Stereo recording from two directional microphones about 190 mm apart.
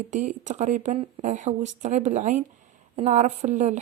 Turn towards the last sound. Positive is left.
turn(degrees=-35)  # may be behind; listen again after turning